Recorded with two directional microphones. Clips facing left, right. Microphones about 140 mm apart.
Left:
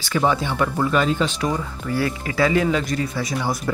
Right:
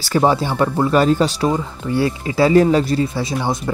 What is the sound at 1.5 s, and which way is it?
Speech, 25° right (ahead or behind).